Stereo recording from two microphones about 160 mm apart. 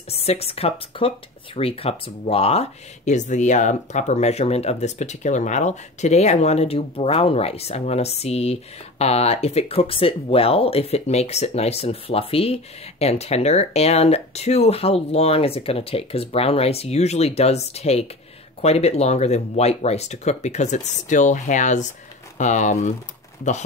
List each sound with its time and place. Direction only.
0.1 s speech: 40° left (ahead or behind)